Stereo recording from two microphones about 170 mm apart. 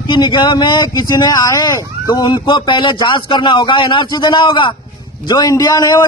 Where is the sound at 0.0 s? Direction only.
25° left (ahead or behind).